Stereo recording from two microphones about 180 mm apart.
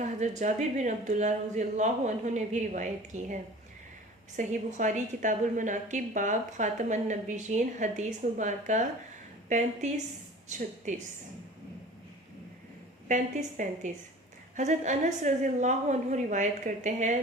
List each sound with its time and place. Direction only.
0.0 s speech: 45° right (ahead or behind)
4.4 s a woman's voice: 45° right (ahead or behind)
13.1 s a woman's voice: 45° right (ahead or behind)